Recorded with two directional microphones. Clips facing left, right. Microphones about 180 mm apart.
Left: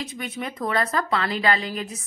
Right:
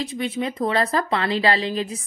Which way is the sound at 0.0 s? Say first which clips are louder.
Right 6 dB; 30° right (ahead or behind).